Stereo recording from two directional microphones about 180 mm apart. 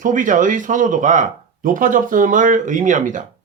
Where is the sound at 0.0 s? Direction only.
45° right (ahead or behind).